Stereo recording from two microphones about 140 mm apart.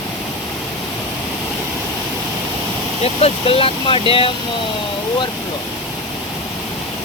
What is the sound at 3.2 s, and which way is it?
Speech, 40° left (ahead or behind).